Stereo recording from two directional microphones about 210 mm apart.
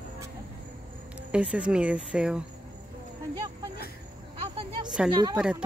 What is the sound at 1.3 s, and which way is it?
Speech, 5° right (ahead or behind).